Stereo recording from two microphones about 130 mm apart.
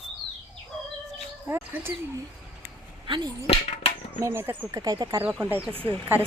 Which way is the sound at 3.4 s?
50° left (ahead or behind).